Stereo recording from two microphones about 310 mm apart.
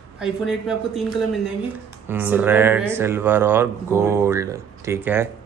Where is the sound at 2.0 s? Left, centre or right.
Centre.